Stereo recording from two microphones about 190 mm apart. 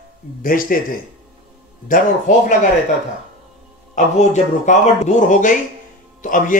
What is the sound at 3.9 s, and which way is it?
A man's voice, 40° left (ahead or behind).